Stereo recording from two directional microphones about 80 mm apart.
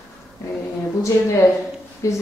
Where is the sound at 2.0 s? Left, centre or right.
Left.